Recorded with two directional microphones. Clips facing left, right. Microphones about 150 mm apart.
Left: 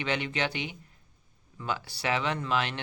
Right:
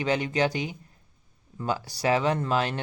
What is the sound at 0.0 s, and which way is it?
Speech, 40° right (ahead or behind).